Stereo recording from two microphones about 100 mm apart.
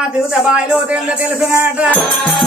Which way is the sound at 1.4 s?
25° right (ahead or behind).